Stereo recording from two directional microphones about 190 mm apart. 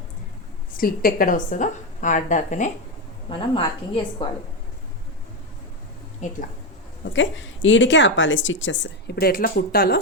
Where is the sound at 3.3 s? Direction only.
25° left (ahead or behind).